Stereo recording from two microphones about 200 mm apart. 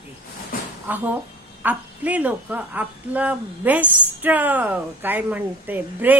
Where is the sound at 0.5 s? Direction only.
45° left (ahead or behind).